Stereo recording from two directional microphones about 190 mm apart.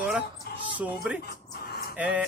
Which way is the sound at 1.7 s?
55° left (ahead or behind).